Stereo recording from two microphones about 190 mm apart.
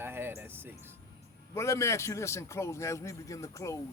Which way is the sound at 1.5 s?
15° left (ahead or behind).